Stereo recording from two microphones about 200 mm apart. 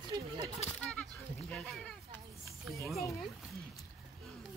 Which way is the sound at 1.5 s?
5° left (ahead or behind).